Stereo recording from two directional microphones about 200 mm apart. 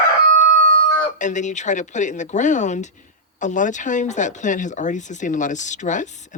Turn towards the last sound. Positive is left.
turn(degrees=40)  # may be behind; listen again after turning